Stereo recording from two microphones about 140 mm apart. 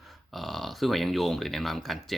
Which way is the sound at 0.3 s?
Centre (ahead or behind).